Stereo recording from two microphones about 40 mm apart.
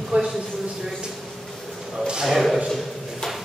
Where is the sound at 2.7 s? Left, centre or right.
Centre.